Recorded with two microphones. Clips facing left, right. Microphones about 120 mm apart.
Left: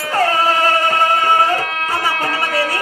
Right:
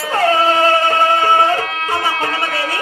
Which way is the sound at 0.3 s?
25° right (ahead or behind).